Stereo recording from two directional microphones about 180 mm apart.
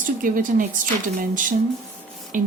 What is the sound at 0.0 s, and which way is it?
Speech, 50° right (ahead or behind).